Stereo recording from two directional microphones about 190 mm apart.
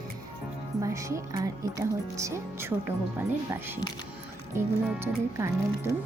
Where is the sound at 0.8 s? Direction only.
15° right (ahead or behind).